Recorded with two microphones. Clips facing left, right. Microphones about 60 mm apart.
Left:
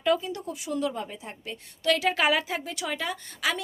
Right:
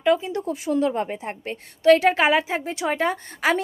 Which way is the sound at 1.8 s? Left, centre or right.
Right.